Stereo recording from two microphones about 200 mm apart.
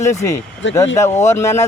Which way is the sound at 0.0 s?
15° left (ahead or behind).